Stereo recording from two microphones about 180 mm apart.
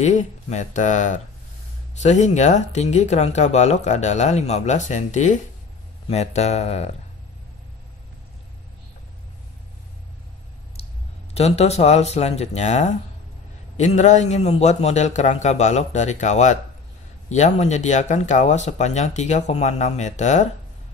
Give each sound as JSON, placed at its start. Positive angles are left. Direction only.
{"t": 0.0, "sound": "speech", "side_deg": 40}
{"t": 11.3, "sound": "speech", "side_deg": 35}